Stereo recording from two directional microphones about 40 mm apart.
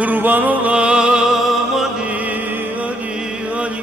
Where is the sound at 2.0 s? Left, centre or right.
Right.